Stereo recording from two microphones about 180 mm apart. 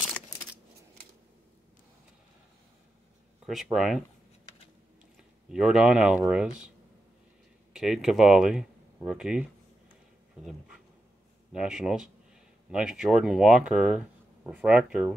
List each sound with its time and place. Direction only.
3.4 s speech: centre (ahead or behind)
5.5 s speech: 5° right (ahead or behind)
7.7 s speech: 5° right (ahead or behind)
11.5 s speech: 5° right (ahead or behind)